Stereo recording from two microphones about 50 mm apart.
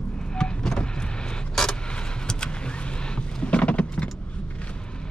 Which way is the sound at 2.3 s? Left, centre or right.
Centre.